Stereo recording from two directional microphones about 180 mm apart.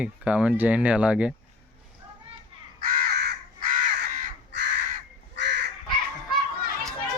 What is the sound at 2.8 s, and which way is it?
Crow, 65° right (ahead or behind).